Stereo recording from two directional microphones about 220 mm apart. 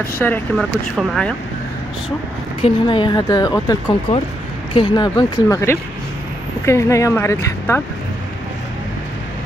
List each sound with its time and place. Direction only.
0.2 s speech: 10° left (ahead or behind)
2.6 s speech: 20° left (ahead or behind)